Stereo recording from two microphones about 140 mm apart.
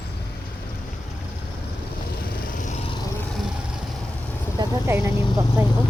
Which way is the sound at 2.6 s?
60° left (ahead or behind).